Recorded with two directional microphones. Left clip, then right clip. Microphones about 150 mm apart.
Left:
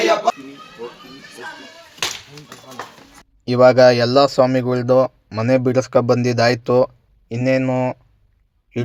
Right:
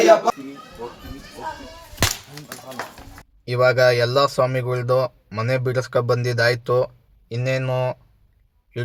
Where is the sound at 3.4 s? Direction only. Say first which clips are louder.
Left 6 dB; 30° left (ahead or behind).